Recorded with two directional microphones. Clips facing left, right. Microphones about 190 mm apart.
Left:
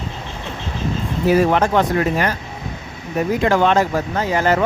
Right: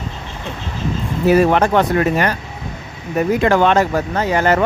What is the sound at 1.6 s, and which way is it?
Speech, 65° right (ahead or behind).